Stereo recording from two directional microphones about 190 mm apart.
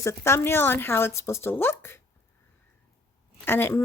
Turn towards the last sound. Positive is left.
turn(degrees=10)  # may be behind; listen again after turning